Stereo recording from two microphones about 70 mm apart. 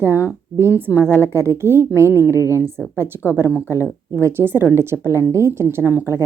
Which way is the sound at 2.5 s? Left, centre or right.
Right.